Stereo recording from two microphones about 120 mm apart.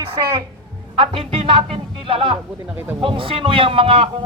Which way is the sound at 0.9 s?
50° right (ahead or behind).